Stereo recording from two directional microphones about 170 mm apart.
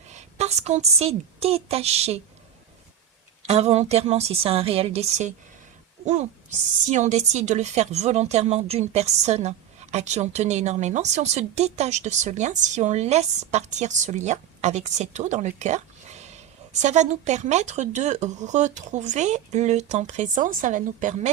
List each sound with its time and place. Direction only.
0.1 s a woman's voice: 40° right (ahead or behind)
3.4 s speech: 40° right (ahead or behind)